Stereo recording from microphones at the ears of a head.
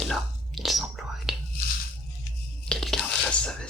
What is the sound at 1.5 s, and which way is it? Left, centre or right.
Music, left.